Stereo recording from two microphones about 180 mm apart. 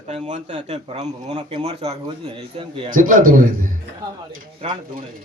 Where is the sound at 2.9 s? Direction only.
50° right (ahead or behind).